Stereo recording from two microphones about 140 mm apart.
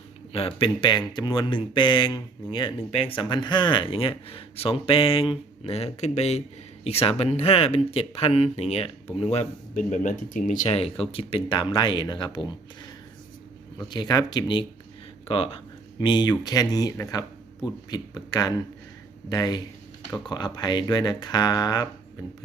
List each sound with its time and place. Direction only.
0.3 s speech: 40° left (ahead or behind); by 10.6 s 70° left (ahead or behind)
10.7 s speech: 45° left (ahead or behind)
13.8 s speech: 30° left (ahead or behind)